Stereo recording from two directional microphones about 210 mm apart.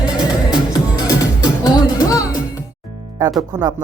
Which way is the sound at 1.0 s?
15° left (ahead or behind).